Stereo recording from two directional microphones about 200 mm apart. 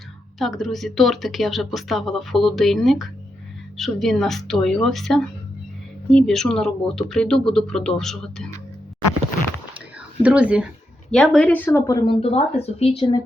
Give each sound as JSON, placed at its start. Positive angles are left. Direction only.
{"t": 0.3, "sound": "speech", "side_deg": 0}
{"t": 10.2, "sound": "speech", "side_deg": -5}
{"t": 12.2, "sound": "speech", "side_deg": 30}